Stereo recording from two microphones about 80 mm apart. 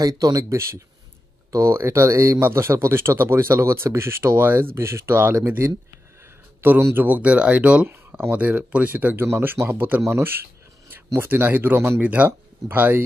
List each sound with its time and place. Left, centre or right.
0.0 s speech: right